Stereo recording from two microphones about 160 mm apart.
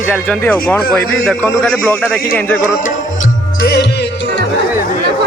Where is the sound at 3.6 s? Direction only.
90° left.